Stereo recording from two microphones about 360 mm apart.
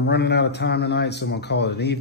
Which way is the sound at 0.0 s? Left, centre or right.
Left.